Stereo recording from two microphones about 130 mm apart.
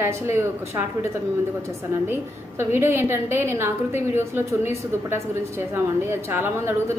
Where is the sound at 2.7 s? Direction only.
20° right (ahead or behind).